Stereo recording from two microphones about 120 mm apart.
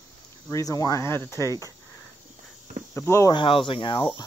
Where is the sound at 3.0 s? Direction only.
25° left (ahead or behind).